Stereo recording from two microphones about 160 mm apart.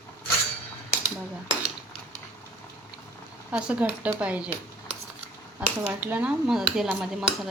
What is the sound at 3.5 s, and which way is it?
Speech, 5° right (ahead or behind).